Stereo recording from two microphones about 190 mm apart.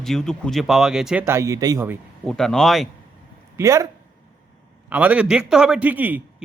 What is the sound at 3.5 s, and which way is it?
Speech, 15° right (ahead or behind).